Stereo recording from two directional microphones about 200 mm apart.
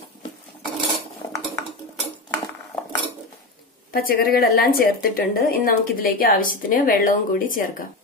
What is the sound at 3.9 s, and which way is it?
Speech, 45° left (ahead or behind).